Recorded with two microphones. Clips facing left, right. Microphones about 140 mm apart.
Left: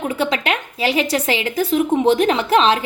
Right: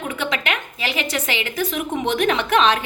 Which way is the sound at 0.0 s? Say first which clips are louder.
Left 5 dB; 35° left (ahead or behind).